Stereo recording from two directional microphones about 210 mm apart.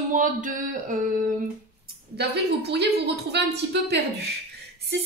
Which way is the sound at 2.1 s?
50° right (ahead or behind).